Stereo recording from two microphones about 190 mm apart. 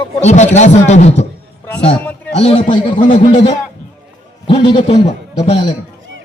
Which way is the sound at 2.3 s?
30° left (ahead or behind).